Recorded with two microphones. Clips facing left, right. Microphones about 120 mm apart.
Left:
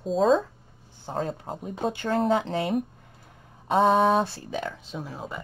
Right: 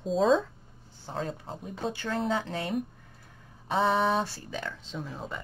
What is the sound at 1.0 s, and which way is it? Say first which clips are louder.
Speech: left 4 dB; 45° left (ahead or behind).